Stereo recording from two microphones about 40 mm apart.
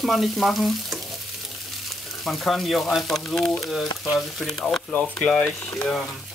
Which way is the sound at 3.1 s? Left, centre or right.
Centre.